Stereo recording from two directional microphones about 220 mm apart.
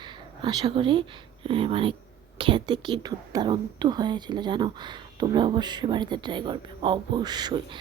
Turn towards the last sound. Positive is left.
turn(degrees=-20)  # may be behind; listen again after turning